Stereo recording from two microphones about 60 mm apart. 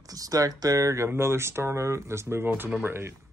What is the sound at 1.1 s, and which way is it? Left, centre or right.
Speech, right.